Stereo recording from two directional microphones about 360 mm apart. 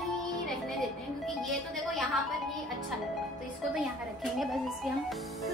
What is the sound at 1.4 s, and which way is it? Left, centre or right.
Speech, centre.